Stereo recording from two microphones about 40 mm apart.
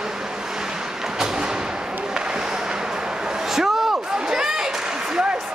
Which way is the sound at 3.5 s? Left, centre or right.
Centre.